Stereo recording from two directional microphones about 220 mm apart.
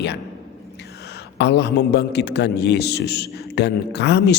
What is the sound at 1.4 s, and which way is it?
A man's voice, 50° left (ahead or behind).